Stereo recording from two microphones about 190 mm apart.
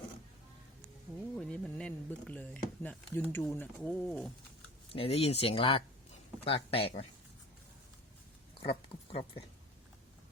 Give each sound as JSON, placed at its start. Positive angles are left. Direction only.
{"t": 1.4, "sound": "speech", "side_deg": 5}
{"t": 4.9, "sound": "speech", "side_deg": 30}
{"t": 8.6, "sound": "speech", "side_deg": 30}